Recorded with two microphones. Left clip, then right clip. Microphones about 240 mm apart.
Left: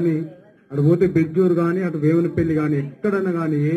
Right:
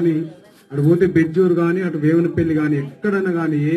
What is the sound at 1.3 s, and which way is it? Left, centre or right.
A man's voice, right.